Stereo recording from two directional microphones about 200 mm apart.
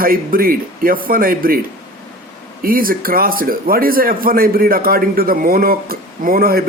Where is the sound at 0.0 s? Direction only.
45° right (ahead or behind).